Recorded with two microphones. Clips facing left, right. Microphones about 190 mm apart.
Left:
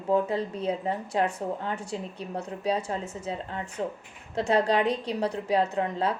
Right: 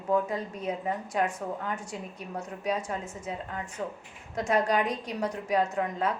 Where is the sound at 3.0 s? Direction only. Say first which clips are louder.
Left 3 dB; 65° left (ahead or behind).